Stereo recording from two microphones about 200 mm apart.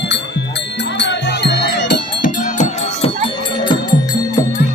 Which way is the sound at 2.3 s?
35° left (ahead or behind).